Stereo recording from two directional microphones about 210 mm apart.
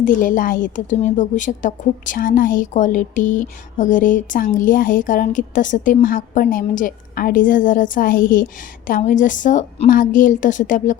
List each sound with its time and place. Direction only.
0.0 s a woman's voice: 40° left (ahead or behind)